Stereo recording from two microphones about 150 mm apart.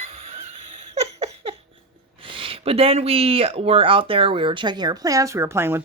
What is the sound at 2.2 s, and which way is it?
Speech, 35° right (ahead or behind).